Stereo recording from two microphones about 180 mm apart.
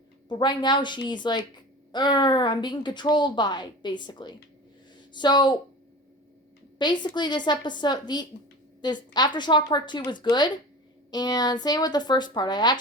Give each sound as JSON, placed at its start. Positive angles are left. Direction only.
{"t": 0.3, "sound": "a woman's voice", "side_deg": 25}
{"t": 6.7, "sound": "a woman's voice", "side_deg": 25}